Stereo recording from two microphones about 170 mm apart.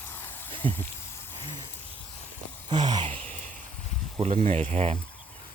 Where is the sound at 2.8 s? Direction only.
25° right (ahead or behind).